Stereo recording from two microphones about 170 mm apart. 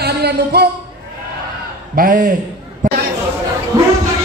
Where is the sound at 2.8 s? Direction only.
50° right (ahead or behind).